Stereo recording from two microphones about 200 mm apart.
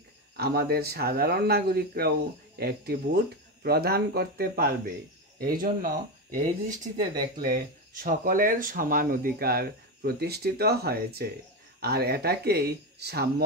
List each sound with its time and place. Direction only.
0.4 s speech: 50° right (ahead or behind)